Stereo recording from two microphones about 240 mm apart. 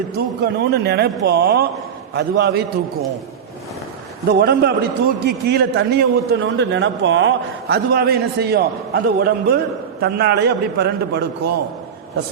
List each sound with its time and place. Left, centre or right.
0.2 s a man's voice: right
4.3 s a man's voice: right